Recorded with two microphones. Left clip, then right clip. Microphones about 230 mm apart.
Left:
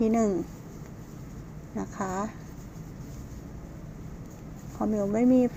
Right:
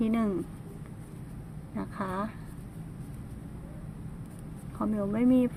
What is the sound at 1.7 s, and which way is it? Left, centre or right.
Speech, right.